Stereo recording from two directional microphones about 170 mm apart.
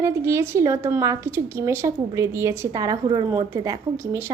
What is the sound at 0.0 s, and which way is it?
A woman's voice, 15° right (ahead or behind).